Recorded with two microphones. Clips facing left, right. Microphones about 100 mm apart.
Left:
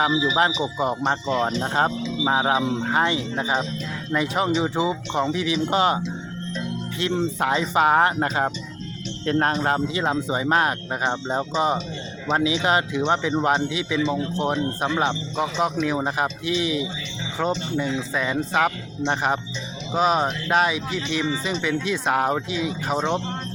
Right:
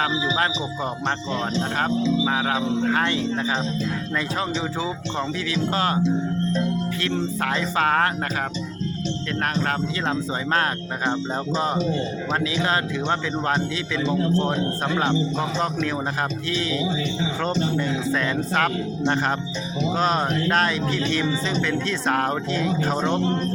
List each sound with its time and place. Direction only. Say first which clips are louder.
0.3 s speech: left 3 dB; 20° left (ahead or behind)
1.9 s speech: right 7 dB; 30° right (ahead or behind)
2.2 s speech: left 2 dB; 25° left (ahead or behind)
7.4 s speech: left 4 dB; 20° left (ahead or behind)
10.0 s speech: left 2 dB; 15° left (ahead or behind)
18.1 s speech: even; 10° left (ahead or behind)